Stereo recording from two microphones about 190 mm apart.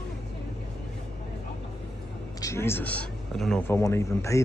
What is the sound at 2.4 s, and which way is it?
Speech, 15° left (ahead or behind).